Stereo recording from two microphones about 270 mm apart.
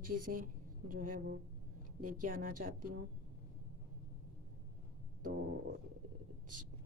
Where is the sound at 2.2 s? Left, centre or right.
Right.